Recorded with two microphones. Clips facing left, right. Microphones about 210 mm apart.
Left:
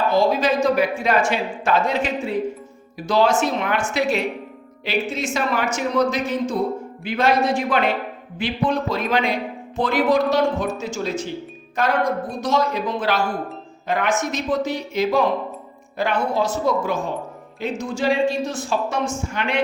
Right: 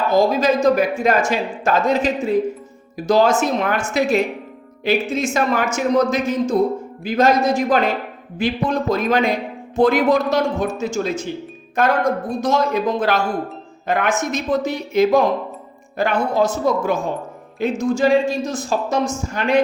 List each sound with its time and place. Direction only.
0.1 s a woman's voice: 45° right (ahead or behind)